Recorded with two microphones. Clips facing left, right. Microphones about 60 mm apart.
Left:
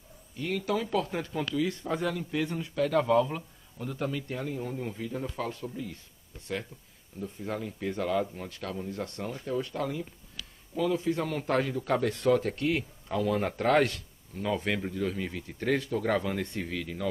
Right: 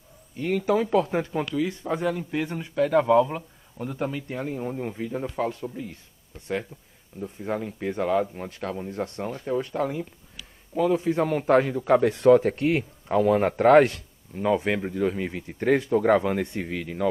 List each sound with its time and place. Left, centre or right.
0.4 s speech: right
7.2 s speech: right